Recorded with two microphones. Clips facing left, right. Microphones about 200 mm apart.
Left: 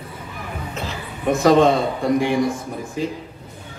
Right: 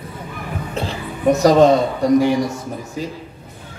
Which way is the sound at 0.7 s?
35° right (ahead or behind).